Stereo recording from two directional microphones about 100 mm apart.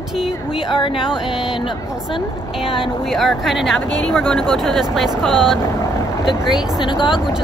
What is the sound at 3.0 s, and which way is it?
Speech, centre (ahead or behind).